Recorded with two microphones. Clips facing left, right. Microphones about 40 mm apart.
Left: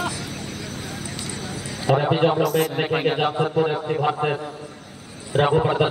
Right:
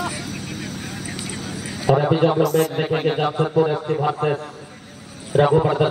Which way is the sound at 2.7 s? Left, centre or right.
Centre.